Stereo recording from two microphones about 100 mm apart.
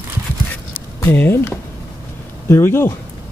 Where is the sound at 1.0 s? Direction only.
25° left (ahead or behind).